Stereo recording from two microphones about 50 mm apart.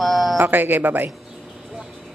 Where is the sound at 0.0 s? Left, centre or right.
Centre.